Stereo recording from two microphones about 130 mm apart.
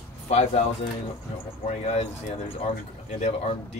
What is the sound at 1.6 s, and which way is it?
Speech, 60° left (ahead or behind).